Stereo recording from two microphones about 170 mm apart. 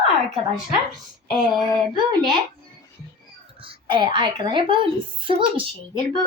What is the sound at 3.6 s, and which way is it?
A woman's voice, 30° right (ahead or behind).